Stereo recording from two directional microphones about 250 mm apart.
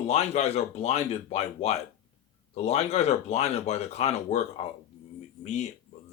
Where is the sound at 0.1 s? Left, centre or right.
Left.